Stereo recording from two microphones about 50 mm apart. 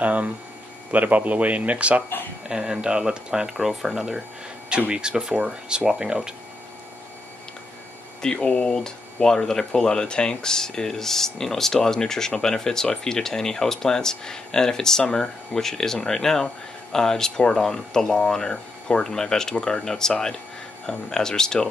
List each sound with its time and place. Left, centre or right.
0.0 s a man's voice: right
2.4 s speech: centre
8.2 s speech: centre